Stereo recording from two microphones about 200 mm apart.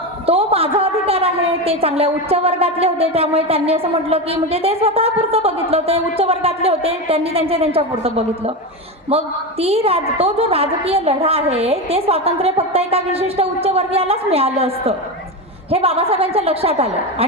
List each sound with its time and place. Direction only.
0.3 s a woman's voice: 30° right (ahead or behind)